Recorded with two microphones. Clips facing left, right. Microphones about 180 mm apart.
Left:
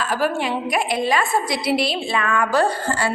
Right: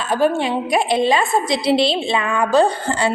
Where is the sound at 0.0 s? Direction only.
25° right (ahead or behind).